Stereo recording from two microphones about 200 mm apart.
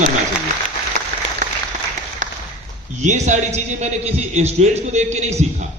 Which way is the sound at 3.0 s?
35° right (ahead or behind).